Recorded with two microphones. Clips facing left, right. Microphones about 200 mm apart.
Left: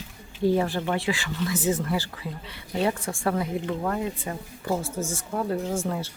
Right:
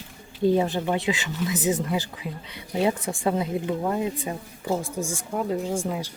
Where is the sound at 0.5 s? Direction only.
20° right (ahead or behind).